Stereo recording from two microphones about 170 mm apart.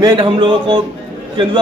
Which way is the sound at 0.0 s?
25° right (ahead or behind).